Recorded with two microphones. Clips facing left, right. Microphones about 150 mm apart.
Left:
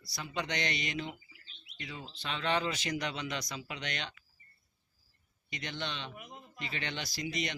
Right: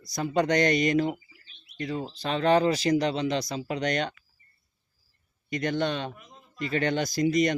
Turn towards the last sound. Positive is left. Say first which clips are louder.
# right 14 dB
turn(degrees=-45)  # may be behind; listen again after turning